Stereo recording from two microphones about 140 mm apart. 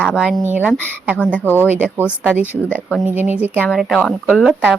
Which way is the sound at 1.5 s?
15° right (ahead or behind).